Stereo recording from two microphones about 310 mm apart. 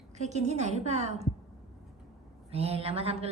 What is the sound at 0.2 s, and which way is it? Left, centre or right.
Speech, right.